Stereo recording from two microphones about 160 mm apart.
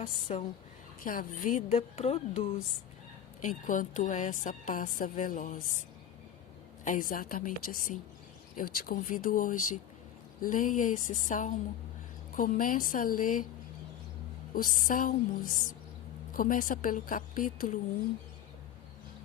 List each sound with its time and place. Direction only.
0.0 s speech: 35° left (ahead or behind)
1.0 s a woman's voice: 60° left (ahead or behind)
1.7 s speech: 40° left (ahead or behind)
3.4 s a woman's voice: 55° left (ahead or behind)
6.8 s a woman's voice: 55° left (ahead or behind)
14.5 s a woman's voice: 60° left (ahead or behind)